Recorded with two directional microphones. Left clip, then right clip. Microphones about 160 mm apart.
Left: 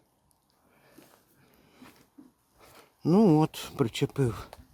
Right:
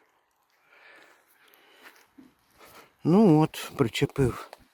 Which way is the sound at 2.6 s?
5° right (ahead or behind).